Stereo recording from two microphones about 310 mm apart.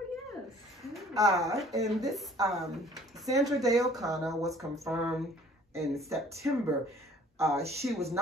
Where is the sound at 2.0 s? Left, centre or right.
Centre.